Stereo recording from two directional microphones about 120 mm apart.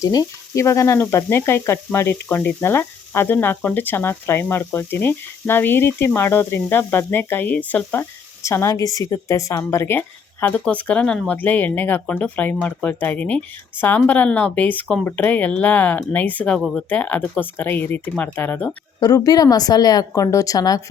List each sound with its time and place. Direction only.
0.0 s sizzle: 30° left (ahead or behind); by 7.9 s 10° left (ahead or behind)
8.4 s sizzle: 25° left (ahead or behind)
10.4 s speech: 10° left (ahead or behind)
18.9 s speech: 30° left (ahead or behind)